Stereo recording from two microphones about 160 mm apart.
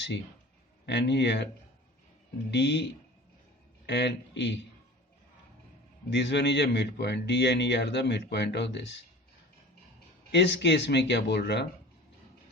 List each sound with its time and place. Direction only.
0.9 s speech: 90° left
2.5 s speech: 90° left
3.8 s speech: 90° left
6.1 s speech: 90° left
10.3 s speech: 90° left